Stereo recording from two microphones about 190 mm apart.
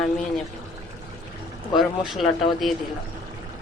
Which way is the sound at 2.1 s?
Centre (ahead or behind).